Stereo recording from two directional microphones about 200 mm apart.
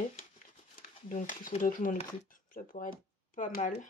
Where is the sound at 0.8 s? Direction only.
40° left (ahead or behind).